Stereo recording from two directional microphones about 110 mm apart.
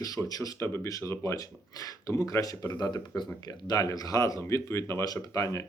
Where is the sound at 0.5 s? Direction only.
20° left (ahead or behind).